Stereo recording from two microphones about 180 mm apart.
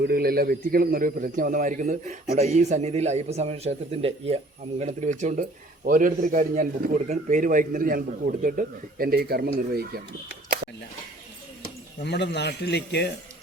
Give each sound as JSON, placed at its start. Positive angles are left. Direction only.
{"t": 0.0, "sound": "a man's voice", "side_deg": -55}
{"t": 12.0, "sound": "speech", "side_deg": 70}